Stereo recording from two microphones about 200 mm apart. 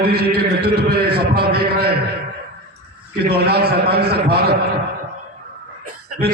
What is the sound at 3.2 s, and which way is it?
A man's voice, 50° right (ahead or behind).